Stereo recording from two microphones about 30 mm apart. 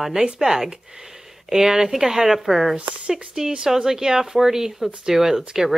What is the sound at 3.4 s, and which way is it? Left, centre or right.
Speech, right.